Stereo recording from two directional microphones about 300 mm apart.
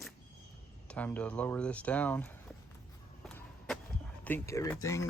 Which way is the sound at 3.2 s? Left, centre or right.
Centre.